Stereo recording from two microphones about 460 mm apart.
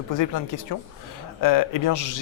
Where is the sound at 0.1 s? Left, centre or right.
Left.